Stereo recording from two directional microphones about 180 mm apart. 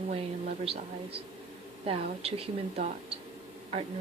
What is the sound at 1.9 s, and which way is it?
A woman's voice, 35° right (ahead or behind).